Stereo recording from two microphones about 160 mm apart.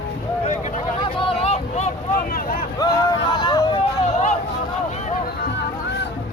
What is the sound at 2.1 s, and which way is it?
Speech, 65° left (ahead or behind).